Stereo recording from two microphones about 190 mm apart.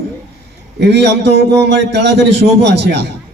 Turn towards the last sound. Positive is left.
turn(degrees=-65)  # may be behind; listen again after turning